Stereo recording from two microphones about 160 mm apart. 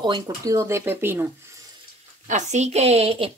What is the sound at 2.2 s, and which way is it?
A woman's voice, 50° right (ahead or behind).